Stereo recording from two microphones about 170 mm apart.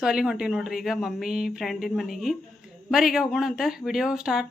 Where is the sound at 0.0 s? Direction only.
5° right (ahead or behind).